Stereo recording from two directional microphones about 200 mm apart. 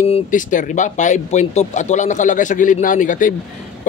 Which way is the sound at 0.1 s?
40° left (ahead or behind).